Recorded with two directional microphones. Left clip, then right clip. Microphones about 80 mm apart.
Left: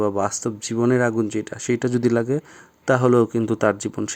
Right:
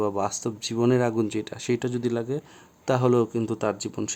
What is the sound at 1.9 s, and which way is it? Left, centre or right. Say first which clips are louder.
Speech: left 7 dB; left.